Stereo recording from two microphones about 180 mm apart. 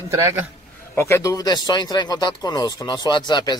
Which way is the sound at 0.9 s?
15° left (ahead or behind).